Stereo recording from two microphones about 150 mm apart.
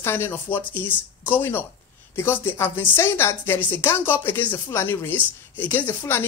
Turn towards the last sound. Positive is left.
turn(degrees=15)  # may be behind; listen again after turning